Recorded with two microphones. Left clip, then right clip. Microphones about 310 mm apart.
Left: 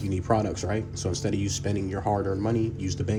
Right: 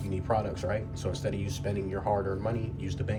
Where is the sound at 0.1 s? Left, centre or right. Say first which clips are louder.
Left 4 dB; left.